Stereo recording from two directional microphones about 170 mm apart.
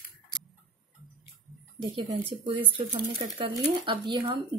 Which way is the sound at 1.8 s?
30° right (ahead or behind).